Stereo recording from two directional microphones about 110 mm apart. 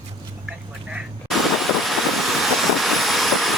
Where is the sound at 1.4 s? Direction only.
Centre (ahead or behind).